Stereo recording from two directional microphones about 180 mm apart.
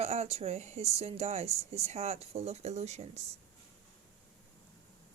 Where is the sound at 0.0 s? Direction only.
35° right (ahead or behind).